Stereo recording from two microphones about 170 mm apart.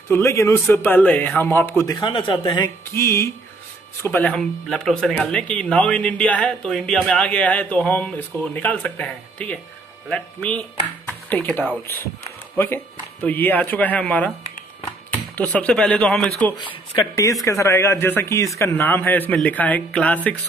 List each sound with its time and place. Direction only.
0.1 s speech: 15° left (ahead or behind)
2.9 s speech: 15° left (ahead or behind)
15.3 s speech: 10° left (ahead or behind)
16.6 s speech: 20° left (ahead or behind)